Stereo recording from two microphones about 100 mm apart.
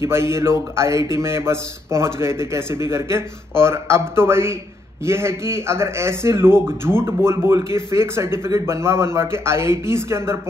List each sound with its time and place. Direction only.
0.0 s a man's voice: 25° right (ahead or behind)